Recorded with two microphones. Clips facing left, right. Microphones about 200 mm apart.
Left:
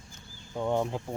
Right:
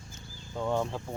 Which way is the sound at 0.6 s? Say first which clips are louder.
Left 2 dB; 15° left (ahead or behind).